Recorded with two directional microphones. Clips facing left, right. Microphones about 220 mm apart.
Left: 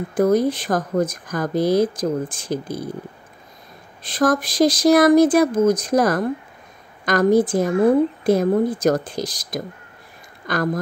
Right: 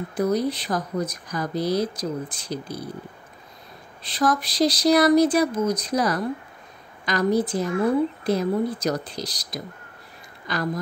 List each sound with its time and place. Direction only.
0.1 s speech: 50° left (ahead or behind)
4.0 s speech: 50° left (ahead or behind)